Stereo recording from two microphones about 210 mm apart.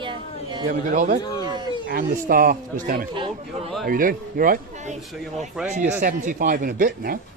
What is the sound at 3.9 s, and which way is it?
A man's voice, 40° right (ahead or behind).